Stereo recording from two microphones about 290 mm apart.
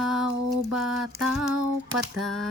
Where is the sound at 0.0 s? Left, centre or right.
Centre.